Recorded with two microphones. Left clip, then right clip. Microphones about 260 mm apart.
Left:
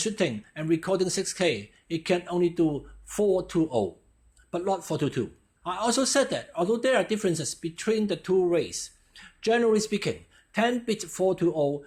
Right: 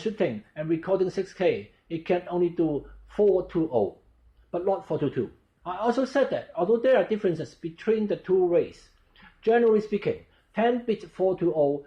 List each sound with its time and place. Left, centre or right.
0.0 s speech: left